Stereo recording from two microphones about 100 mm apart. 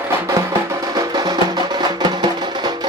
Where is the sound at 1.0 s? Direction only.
45° right (ahead or behind).